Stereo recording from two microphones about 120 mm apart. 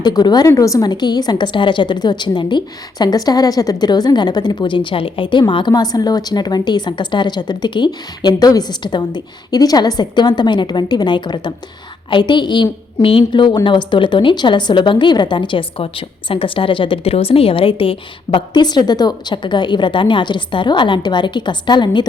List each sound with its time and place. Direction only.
0.0 s a woman's voice: 35° left (ahead or behind)